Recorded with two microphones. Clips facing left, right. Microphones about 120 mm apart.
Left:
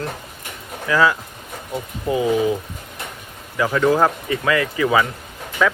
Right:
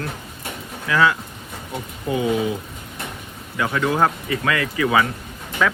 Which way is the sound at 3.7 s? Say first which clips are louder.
Left 3 dB; 30° left (ahead or behind).